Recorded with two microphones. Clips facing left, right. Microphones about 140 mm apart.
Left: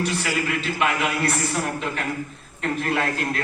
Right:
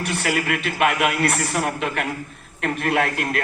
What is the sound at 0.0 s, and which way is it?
A man's voice, 60° right (ahead or behind).